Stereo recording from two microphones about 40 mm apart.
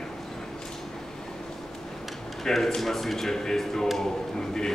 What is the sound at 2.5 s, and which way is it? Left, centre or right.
Speech, centre.